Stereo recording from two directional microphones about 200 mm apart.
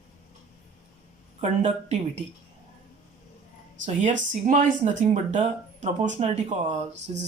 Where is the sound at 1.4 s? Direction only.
35° right (ahead or behind).